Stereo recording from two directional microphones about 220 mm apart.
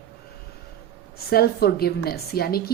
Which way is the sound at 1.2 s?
45° left (ahead or behind).